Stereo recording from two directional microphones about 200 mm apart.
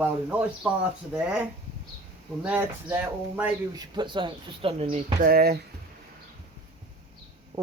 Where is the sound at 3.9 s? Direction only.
25° right (ahead or behind).